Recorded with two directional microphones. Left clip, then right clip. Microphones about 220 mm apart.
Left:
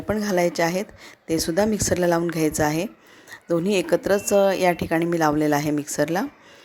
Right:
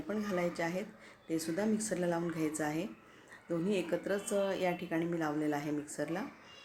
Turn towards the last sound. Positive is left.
turn(degrees=45)  # may be behind; listen again after turning